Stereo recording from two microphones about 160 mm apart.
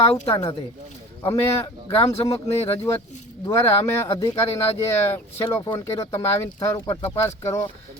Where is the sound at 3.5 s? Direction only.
15° left (ahead or behind).